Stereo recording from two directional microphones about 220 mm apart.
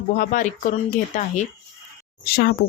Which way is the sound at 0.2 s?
35° left (ahead or behind).